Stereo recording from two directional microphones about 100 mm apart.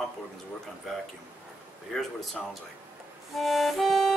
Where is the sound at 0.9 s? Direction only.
Centre (ahead or behind).